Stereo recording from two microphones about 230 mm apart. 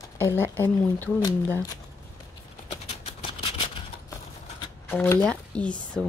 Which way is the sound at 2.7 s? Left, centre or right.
Left.